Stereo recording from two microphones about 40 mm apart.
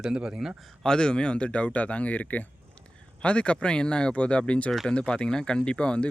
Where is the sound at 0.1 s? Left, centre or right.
Centre.